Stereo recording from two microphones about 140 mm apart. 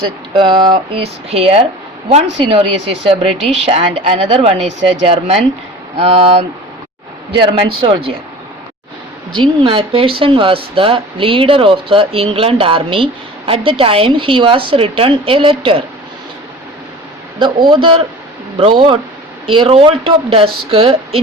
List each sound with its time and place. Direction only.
0.0 s speech: 35° right (ahead or behind)
1.3 s speech: 45° right (ahead or behind)
9.3 s speech: 35° right (ahead or behind)
17.4 s speech: 35° right (ahead or behind)